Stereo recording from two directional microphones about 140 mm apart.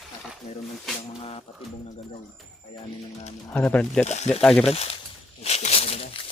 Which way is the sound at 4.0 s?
55° left (ahead or behind).